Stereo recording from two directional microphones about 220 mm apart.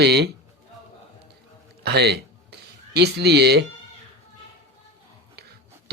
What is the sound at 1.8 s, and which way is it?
Speech, 50° right (ahead or behind).